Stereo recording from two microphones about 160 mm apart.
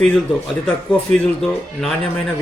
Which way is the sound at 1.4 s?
5° left (ahead or behind).